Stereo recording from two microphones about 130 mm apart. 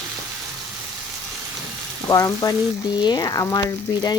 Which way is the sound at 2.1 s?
25° left (ahead or behind).